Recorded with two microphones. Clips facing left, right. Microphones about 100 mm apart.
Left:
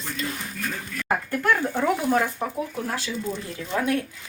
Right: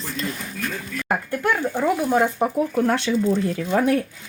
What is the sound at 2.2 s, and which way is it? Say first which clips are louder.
Speech: right 7 dB; 45° right (ahead or behind).